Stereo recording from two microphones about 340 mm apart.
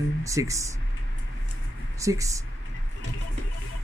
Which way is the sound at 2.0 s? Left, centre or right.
Centre.